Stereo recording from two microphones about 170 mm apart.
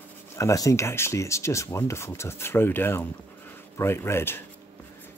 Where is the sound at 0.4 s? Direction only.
20° left (ahead or behind).